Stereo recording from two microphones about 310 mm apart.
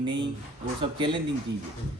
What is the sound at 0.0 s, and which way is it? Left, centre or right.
Speech, centre.